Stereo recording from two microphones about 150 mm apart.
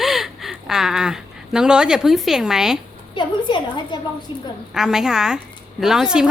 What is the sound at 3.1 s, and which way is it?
Speech, 30° left (ahead or behind).